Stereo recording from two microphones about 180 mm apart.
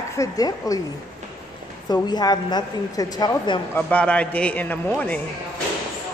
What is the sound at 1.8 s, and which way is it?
A woman's voice, 20° left (ahead or behind).